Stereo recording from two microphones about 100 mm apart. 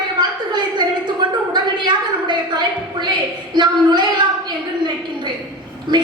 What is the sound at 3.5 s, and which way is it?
Speech, 50° right (ahead or behind).